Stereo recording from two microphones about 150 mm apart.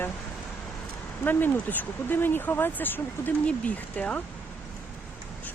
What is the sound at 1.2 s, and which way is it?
Speech, 10° left (ahead or behind).